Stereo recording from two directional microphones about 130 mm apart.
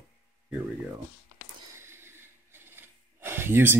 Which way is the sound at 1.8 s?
20° right (ahead or behind).